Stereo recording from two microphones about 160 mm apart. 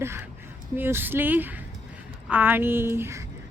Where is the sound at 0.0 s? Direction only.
15° right (ahead or behind).